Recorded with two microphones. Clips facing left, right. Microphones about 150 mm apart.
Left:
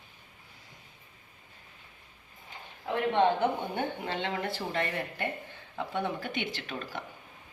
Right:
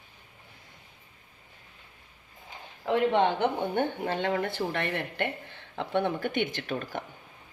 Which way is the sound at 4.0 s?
45° right (ahead or behind).